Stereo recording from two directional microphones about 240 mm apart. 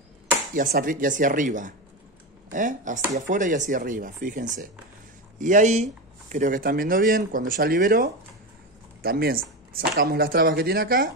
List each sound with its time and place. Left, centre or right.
0.6 s speech: right